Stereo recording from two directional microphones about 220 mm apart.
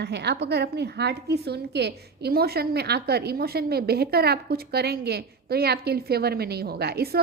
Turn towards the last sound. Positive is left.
turn(degrees=-45)  # may be behind; listen again after turning